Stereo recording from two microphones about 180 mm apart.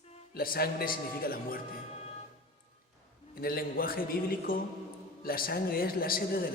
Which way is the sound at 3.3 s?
55° left (ahead or behind).